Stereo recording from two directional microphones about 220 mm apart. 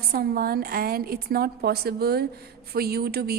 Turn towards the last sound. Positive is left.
turn(degrees=-45)  # may be behind; listen again after turning